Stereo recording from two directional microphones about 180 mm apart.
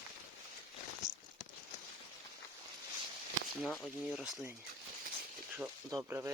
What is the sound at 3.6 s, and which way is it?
Speech, 5° left (ahead or behind).